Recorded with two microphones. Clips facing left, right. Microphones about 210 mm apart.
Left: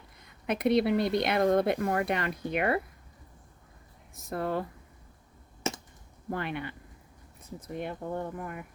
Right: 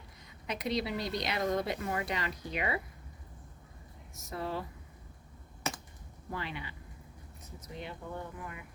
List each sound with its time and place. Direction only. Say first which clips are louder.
0.4 s speech: left 9 dB; 55° left (ahead or behind)
4.1 s speech: left 6 dB; 55° left (ahead or behind)
6.3 s speech: left 6 dB; 55° left (ahead or behind)